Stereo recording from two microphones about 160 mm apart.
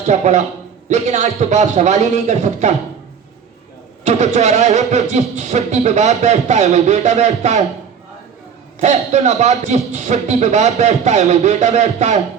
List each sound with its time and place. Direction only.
0.1 s speech: 45° right (ahead or behind)
4.0 s speech: 45° right (ahead or behind)
8.8 s speech: 45° right (ahead or behind)